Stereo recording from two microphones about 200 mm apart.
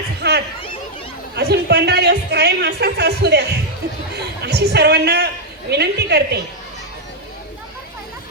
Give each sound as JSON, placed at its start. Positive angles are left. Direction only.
{"t": 0.2, "sound": "a sound", "side_deg": -55}
{"t": 1.4, "sound": "speech", "side_deg": -55}
{"t": 4.4, "sound": "speech", "side_deg": -55}